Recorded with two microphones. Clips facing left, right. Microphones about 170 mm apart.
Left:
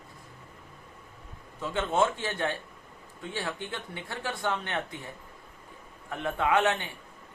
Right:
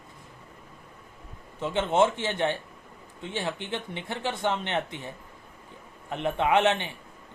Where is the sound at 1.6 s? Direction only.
20° right (ahead or behind).